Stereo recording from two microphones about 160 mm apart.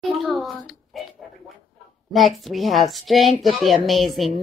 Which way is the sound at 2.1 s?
Centre (ahead or behind).